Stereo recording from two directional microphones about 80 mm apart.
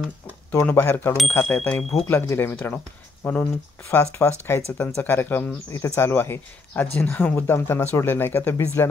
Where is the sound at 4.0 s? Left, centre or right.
Left.